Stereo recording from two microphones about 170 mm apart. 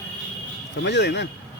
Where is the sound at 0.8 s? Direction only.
90° left.